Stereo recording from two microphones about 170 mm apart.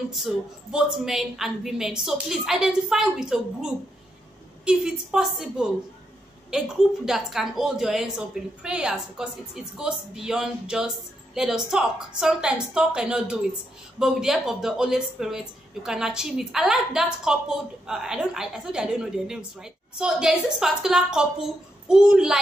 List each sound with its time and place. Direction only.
0.1 s speech: centre (ahead or behind)